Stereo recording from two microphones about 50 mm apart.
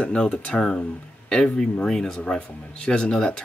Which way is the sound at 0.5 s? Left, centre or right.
Centre.